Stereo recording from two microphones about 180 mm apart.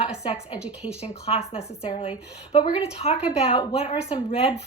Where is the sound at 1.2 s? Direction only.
35° left (ahead or behind).